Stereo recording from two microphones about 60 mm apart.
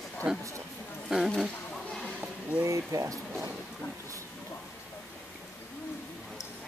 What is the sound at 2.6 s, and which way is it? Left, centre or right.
Speech, right.